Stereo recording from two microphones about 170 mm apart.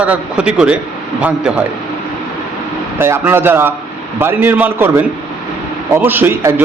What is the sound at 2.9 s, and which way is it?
A man's voice, 15° right (ahead or behind).